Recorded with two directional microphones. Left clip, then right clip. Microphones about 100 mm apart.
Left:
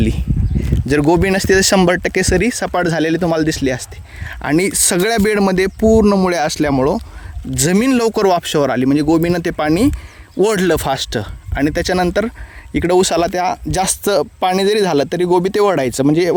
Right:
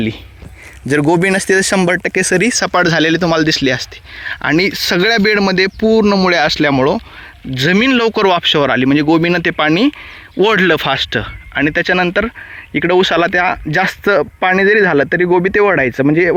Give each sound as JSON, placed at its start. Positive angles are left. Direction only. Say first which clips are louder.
{"t": 0.9, "sound": "speech", "louder": "right 2 dB", "side_deg": 20}
{"t": 1.5, "sound": "speech", "louder": "even", "side_deg": 40}
{"t": 2.2, "sound": "speech", "louder": "right 3 dB", "side_deg": 10}
{"t": 5.8, "sound": "speech", "louder": "left 1 dB", "side_deg": 55}
{"t": 6.1, "sound": "speech", "louder": "right 3 dB", "side_deg": 25}
{"t": 7.5, "sound": "speech", "louder": "right 3 dB", "side_deg": 35}
{"t": 8.8, "sound": "speech", "louder": "right 2 dB", "side_deg": 15}
{"t": 13.1, "sound": "speech", "louder": "right 3 dB", "side_deg": 15}
{"t": 15.3, "sound": "speech", "louder": "even", "side_deg": 30}